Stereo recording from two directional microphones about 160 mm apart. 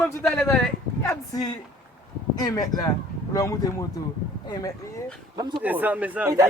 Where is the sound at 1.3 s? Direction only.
25° left (ahead or behind).